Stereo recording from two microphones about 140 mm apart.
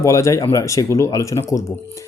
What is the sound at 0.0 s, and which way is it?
Speech, 20° left (ahead or behind).